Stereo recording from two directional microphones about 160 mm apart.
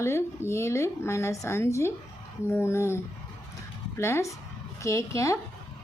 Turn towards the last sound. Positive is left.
turn(degrees=20)  # may be behind; listen again after turning